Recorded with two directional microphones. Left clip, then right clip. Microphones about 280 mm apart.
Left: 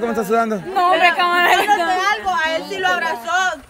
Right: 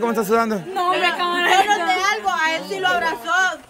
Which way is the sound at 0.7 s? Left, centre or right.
Centre.